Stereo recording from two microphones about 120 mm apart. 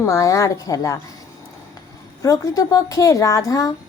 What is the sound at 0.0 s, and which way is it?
Speech, 25° left (ahead or behind).